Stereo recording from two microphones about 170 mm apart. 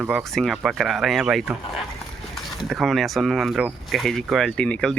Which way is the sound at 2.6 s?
Centre (ahead or behind).